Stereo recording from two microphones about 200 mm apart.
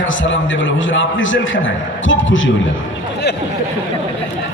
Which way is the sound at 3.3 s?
55° left (ahead or behind).